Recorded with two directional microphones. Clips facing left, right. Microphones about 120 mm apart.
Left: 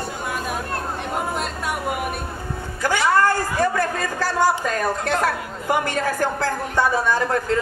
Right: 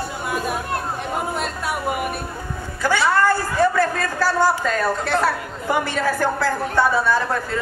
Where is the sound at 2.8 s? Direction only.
15° left (ahead or behind).